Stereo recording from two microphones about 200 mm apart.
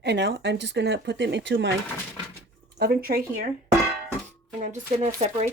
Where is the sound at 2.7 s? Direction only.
50° right (ahead or behind).